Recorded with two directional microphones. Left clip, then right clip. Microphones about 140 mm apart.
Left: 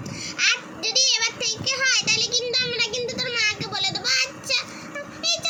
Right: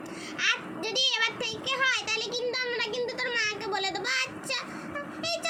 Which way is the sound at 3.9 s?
15° right (ahead or behind).